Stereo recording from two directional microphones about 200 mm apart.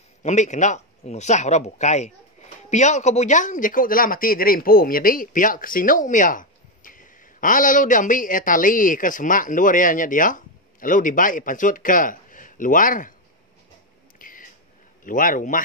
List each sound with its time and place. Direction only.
0.2 s speech: 35° left (ahead or behind)
14.1 s a sound: 45° left (ahead or behind)
15.0 s speech: 40° left (ahead or behind)